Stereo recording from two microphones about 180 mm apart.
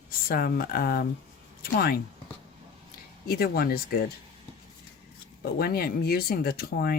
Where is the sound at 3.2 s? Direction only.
55° left (ahead or behind).